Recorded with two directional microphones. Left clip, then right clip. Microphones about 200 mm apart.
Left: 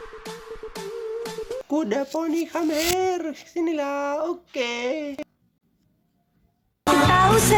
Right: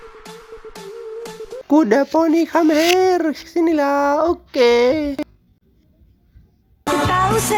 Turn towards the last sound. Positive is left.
turn(degrees=0)  # may be behind; listen again after turning